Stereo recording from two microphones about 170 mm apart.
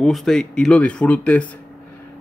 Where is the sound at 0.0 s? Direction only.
Centre (ahead or behind).